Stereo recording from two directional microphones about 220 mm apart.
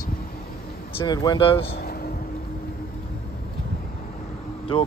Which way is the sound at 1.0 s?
20° left (ahead or behind).